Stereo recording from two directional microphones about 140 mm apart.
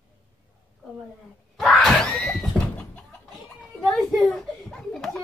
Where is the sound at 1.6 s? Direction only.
Centre (ahead or behind).